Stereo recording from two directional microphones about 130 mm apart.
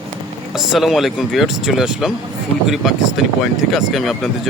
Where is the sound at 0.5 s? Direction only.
Centre (ahead or behind).